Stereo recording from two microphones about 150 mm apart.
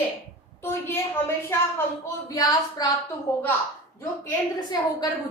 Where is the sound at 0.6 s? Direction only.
15° left (ahead or behind).